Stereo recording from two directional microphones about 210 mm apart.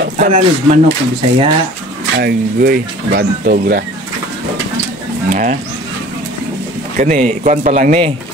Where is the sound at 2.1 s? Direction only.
50° right (ahead or behind).